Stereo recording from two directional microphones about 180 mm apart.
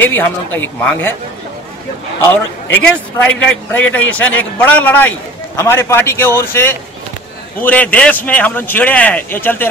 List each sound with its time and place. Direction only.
0.0 s a man's voice: 10° left (ahead or behind)
3.2 s a man's voice: 5° left (ahead or behind)